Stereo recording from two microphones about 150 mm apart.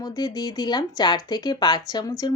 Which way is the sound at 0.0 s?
25° left (ahead or behind).